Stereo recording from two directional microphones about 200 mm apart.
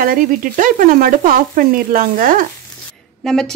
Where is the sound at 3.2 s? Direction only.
Centre (ahead or behind).